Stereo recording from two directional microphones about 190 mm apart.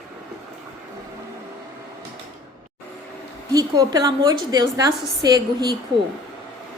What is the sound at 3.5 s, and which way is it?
A woman's voice, 20° right (ahead or behind).